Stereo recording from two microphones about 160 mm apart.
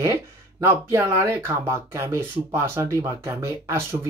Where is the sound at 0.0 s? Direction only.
15° right (ahead or behind).